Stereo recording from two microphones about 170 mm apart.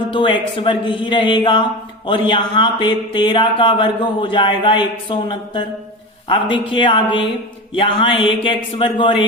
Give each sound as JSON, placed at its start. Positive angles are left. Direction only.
{"t": 0.1, "sound": "speech", "side_deg": 30}